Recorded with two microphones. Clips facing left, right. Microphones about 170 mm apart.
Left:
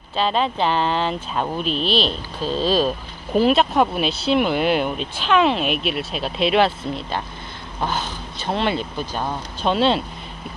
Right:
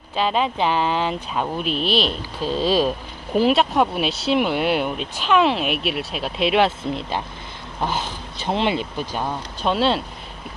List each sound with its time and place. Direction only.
0.1 s speech: 10° right (ahead or behind)
8.5 s speech: 15° right (ahead or behind)
9.2 s speech: 5° right (ahead or behind)